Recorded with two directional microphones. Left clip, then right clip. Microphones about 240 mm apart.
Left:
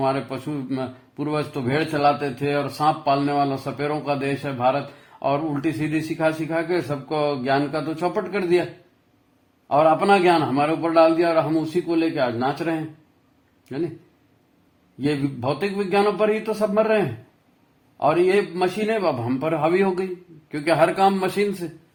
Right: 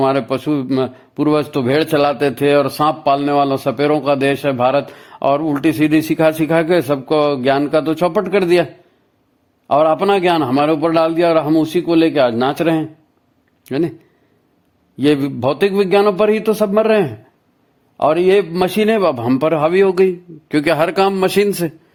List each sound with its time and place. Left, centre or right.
0.0 s a man's voice: right
9.6 s a man's voice: right
14.9 s a man's voice: right